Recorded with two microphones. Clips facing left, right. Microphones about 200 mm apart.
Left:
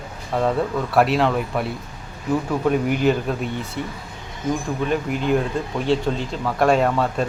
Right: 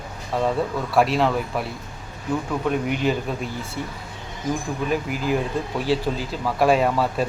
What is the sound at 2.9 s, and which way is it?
Speech, centre (ahead or behind).